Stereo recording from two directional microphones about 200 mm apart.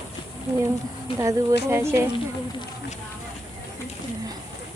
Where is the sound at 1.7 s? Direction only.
15° right (ahead or behind).